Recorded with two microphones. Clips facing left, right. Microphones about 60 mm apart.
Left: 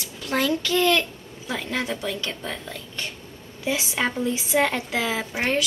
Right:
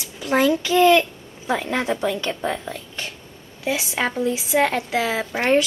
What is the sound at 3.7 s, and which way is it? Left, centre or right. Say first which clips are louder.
Speech: right 2 dB; centre.